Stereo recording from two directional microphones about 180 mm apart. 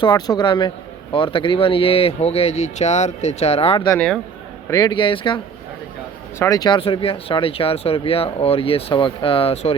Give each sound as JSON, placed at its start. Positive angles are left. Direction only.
{"t": 0.0, "sound": "speech", "side_deg": 25}
{"t": 3.9, "sound": "speech", "side_deg": 5}
{"t": 4.7, "sound": "speech", "side_deg": 25}
{"t": 6.4, "sound": "speech", "side_deg": 20}